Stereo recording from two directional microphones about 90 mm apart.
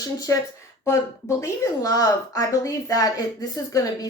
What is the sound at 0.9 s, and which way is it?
Speech, 35° left (ahead or behind).